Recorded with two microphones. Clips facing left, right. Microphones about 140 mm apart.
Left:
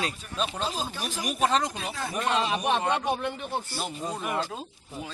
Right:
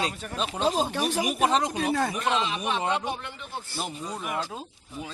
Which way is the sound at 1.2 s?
15° right (ahead or behind).